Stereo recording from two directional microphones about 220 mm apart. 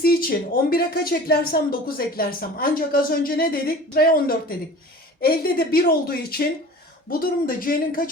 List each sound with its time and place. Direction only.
0.0 s a woman's voice: 40° left (ahead or behind)